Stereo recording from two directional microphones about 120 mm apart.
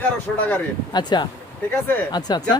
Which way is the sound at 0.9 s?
40° left (ahead or behind).